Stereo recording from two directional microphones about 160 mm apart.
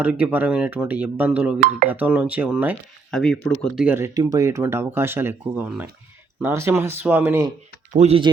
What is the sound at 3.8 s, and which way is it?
Speech, 15° right (ahead or behind).